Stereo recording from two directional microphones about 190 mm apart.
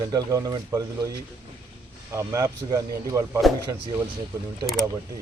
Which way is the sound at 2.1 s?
15° right (ahead or behind).